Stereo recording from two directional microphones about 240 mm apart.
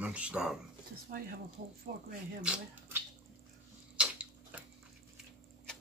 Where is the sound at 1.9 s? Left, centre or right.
Right.